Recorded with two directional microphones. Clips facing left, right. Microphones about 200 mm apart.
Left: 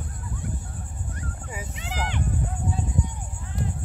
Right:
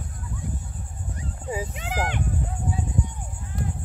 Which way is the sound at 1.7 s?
50° right (ahead or behind).